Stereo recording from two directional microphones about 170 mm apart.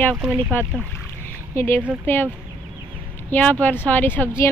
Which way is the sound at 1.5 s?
15° left (ahead or behind).